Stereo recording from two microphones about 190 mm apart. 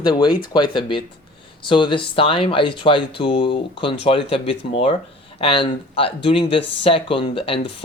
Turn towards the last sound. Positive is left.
turn(degrees=30)  # may be behind; listen again after turning